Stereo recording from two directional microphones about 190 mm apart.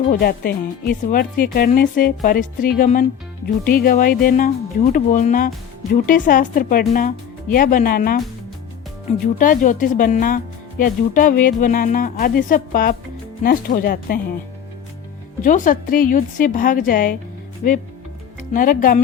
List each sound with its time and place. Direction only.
0.1 s speech: 50° left (ahead or behind)
15.4 s speech: 45° left (ahead or behind)